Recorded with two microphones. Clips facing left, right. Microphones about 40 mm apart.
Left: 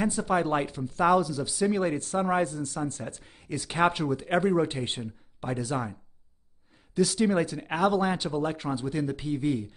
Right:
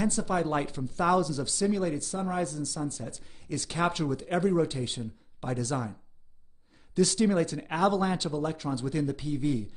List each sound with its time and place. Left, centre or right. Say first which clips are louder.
0.1 s speech: left 2 dB; left
0.7 s speech: left 3 dB; centre
1.8 s speech: left 4 dB; left
2.4 s speech: left 2 dB; left; by 4.3 s centre
4.3 s speech: left 2 dB; left
5.4 s speech: left 1 dB; centre
7.0 s speech: left 1 dB; centre
8.4 s speech: left 2 dB; left
8.8 s speech: right 1 dB; centre